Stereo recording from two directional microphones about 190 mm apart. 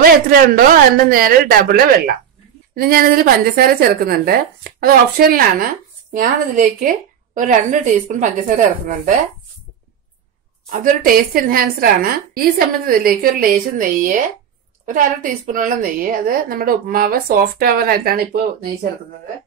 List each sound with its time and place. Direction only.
0.0 s a woman's voice: 50° right (ahead or behind)
10.7 s a woman's voice: 45° right (ahead or behind)